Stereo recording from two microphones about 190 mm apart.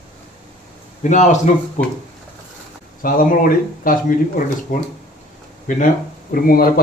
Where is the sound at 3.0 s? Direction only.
50° left (ahead or behind).